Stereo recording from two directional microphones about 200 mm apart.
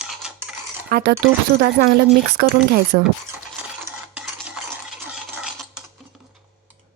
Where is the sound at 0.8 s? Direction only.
50° right (ahead or behind).